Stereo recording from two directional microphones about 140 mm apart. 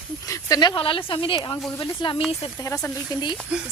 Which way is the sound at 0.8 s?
40° left (ahead or behind).